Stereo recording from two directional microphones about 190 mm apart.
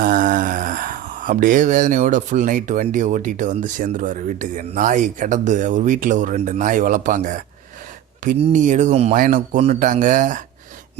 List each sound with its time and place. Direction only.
0.0 s speech: 45° right (ahead or behind)